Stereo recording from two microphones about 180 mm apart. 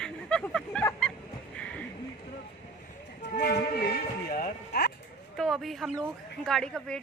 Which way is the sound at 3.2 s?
70° left (ahead or behind).